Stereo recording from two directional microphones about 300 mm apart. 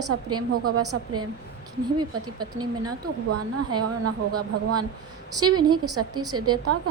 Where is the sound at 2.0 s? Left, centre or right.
Centre.